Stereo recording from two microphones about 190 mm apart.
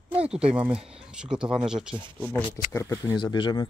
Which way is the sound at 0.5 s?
5° right (ahead or behind).